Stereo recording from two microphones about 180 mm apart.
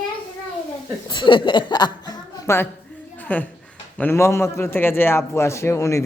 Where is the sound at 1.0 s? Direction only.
25° left (ahead or behind).